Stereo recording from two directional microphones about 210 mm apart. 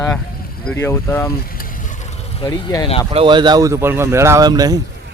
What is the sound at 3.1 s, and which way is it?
Speech, 25° right (ahead or behind).